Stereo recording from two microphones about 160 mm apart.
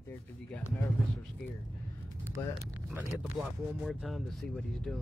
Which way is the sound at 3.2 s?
5° right (ahead or behind).